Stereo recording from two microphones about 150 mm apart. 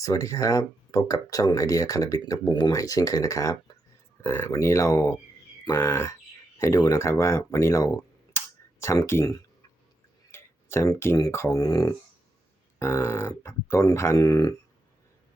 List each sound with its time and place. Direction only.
0.0 s speech: 20° left (ahead or behind)